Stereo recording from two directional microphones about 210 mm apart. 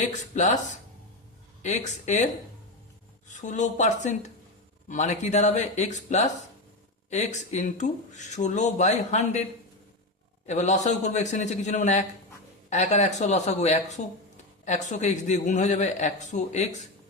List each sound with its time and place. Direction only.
0.0 s speech: 35° left (ahead or behind)
10.4 s speech: 35° left (ahead or behind)